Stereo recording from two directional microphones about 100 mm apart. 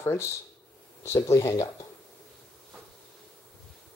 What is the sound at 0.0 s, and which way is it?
Speech, 25° left (ahead or behind).